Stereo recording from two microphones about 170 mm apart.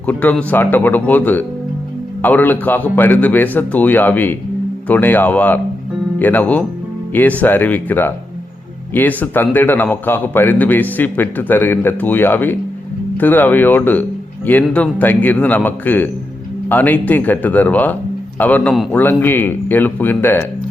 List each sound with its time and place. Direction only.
0.0 s a man's voice: 10° left (ahead or behind)